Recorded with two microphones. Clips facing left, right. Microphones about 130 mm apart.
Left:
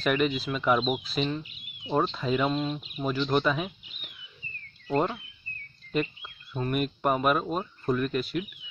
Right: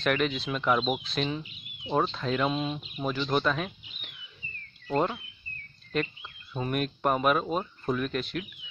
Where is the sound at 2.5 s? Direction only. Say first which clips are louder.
Left 2 dB; 10° right (ahead or behind); by 4.1 s 5° left (ahead or behind).